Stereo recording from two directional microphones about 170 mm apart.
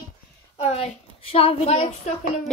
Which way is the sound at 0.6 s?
35° left (ahead or behind).